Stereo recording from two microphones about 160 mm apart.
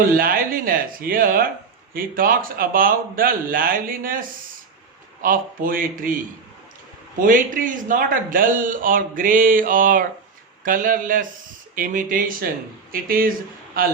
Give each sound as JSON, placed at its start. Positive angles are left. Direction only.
{"t": 0.0, "sound": "a man's voice", "side_deg": -60}
{"t": 7.2, "sound": "a man's voice", "side_deg": -55}